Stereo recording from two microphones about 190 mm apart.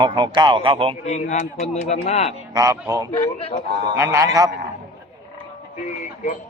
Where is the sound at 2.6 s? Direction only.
15° right (ahead or behind).